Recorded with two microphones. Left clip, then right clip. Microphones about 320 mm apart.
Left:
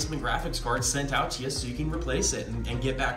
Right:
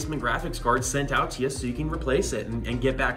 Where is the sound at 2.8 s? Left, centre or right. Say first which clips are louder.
Right 4 dB; right.